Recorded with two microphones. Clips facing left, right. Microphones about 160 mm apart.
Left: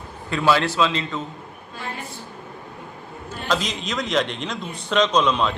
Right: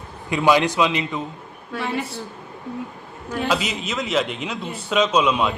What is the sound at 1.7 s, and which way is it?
Speech, 75° right (ahead or behind).